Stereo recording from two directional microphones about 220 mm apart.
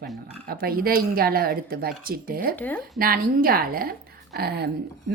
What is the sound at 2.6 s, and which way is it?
Speech, 5° left (ahead or behind).